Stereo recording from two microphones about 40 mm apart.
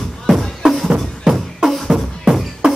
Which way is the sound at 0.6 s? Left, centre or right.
Centre.